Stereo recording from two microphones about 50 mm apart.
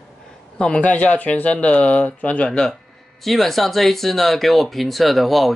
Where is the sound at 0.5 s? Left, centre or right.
Left.